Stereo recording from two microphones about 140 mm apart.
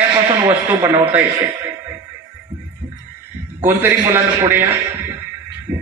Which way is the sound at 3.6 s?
15° right (ahead or behind).